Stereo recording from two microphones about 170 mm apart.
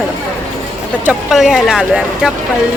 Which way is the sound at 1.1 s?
Centre (ahead or behind).